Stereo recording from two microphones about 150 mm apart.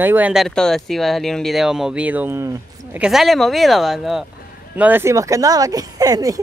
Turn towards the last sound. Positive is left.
turn(degrees=-25)  # may be behind; listen again after turning